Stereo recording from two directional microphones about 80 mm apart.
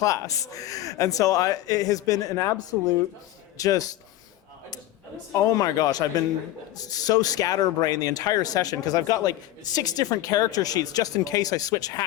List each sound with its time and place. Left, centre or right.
0.0 s speech: left
3.6 s speech: left
5.3 s speech: left